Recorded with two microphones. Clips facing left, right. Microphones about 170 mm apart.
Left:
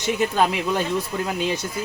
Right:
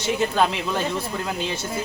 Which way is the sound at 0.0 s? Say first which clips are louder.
Left 1 dB; 15° left (ahead or behind).